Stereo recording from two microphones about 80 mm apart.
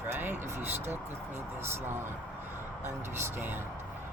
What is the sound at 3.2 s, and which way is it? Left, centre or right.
Speech, right.